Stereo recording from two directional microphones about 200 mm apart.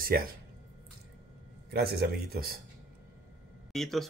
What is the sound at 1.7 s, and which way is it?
Speech, 55° right (ahead or behind).